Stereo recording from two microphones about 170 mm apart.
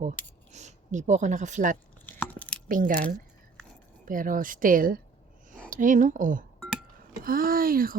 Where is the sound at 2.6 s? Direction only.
50° right (ahead or behind).